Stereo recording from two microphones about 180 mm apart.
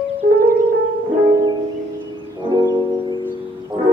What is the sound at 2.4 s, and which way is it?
Music, 25° right (ahead or behind).